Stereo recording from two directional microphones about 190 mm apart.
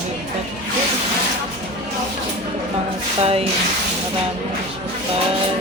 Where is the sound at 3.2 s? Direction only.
30° right (ahead or behind).